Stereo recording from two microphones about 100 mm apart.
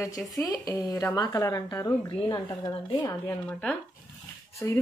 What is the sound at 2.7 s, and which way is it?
Speech, 55° left (ahead or behind).